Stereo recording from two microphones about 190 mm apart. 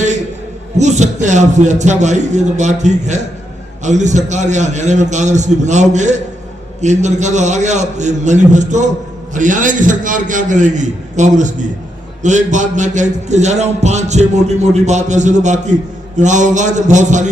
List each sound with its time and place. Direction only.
0.8 s a man's voice: 40° right (ahead or behind)